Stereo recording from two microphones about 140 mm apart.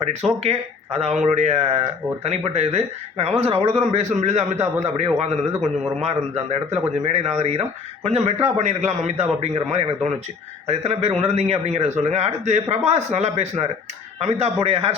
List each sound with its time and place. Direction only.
0.3 s a man's voice: 50° right (ahead or behind)